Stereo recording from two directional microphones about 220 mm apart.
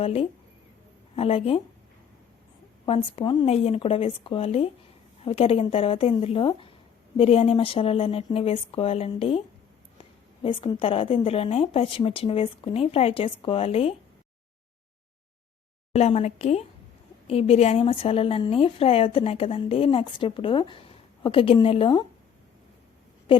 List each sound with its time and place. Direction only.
0.0 s a woman's voice: 25° left (ahead or behind)
2.8 s a woman's voice: 25° left (ahead or behind)
15.9 s a woman's voice: 30° left (ahead or behind)